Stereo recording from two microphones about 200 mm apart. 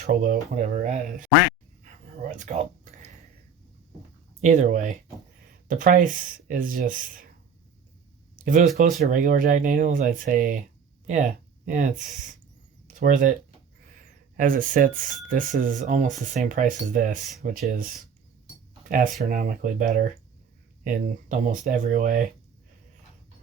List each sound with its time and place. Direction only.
0.0 s speech: 40° right (ahead or behind)
1.8 s a sound: 35° right (ahead or behind)
4.4 s speech: 35° right (ahead or behind)
8.8 s speech: 40° right (ahead or behind)
14.3 s speech: 40° right (ahead or behind)